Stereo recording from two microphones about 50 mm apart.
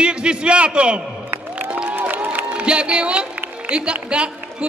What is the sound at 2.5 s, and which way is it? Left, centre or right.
A man's voice, right.